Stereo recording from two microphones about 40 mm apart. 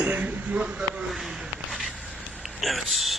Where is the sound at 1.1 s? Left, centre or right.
Centre.